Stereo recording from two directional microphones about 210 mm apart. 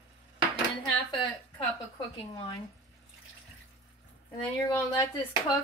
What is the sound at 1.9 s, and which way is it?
Speech, 15° left (ahead or behind).